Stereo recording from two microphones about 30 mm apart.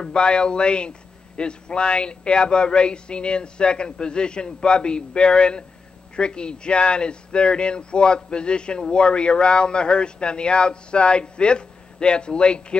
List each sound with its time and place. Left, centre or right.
0.0 s a man's voice: left